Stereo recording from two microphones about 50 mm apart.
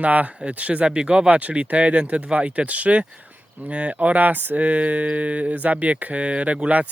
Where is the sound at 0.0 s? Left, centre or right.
Right.